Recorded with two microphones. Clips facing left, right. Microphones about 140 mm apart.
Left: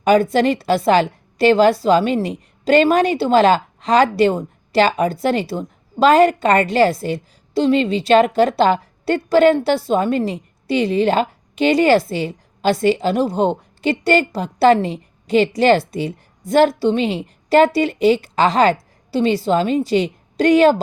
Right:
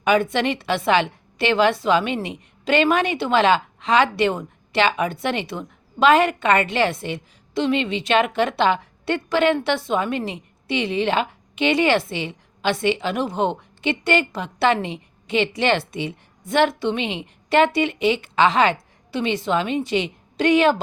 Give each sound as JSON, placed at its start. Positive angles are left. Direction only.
{"t": 0.0, "sound": "a woman's voice", "side_deg": 35}